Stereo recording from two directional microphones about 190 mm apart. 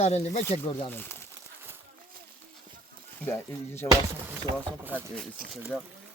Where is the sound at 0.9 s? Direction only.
10° left (ahead or behind).